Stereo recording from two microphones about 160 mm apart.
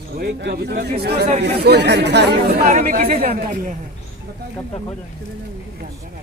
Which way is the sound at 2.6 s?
55° right (ahead or behind).